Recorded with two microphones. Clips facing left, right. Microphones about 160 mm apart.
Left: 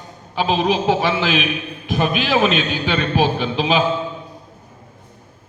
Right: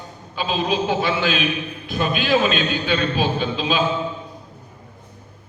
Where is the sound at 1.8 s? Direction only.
80° left.